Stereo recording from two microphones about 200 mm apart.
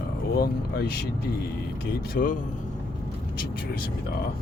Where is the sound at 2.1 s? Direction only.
45° left (ahead or behind).